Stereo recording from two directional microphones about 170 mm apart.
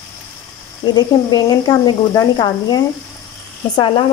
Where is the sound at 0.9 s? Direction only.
20° left (ahead or behind).